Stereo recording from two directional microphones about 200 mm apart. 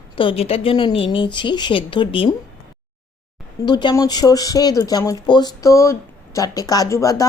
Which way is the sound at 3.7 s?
20° left (ahead or behind).